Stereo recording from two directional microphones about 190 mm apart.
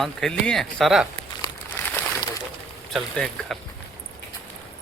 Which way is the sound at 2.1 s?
15° left (ahead or behind).